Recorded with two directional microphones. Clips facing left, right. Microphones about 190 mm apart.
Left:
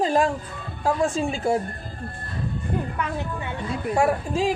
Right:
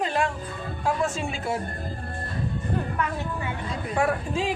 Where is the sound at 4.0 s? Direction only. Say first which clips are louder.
Left 3 dB; 40° left (ahead or behind).